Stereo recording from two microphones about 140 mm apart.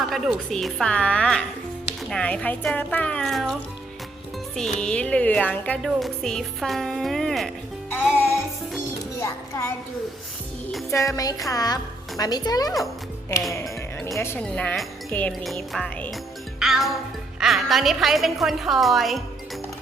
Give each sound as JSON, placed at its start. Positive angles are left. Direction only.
{"t": 0.0, "sound": "a woman's voice", "side_deg": 0}
{"t": 8.1, "sound": "music", "side_deg": 15}
{"t": 9.1, "sound": "speech", "side_deg": 20}
{"t": 10.9, "sound": "speech", "side_deg": 20}
{"t": 13.5, "sound": "music", "side_deg": 20}
{"t": 14.2, "sound": "a woman's voice", "side_deg": 15}